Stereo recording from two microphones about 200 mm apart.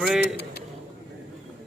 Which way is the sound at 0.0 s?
5° right (ahead or behind).